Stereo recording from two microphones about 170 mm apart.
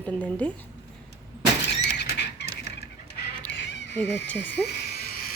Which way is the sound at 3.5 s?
90° left.